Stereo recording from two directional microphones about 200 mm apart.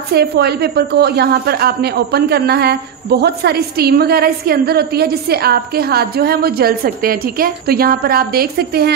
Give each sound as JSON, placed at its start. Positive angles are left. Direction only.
{"t": 0.1, "sound": "a woman's voice", "side_deg": -55}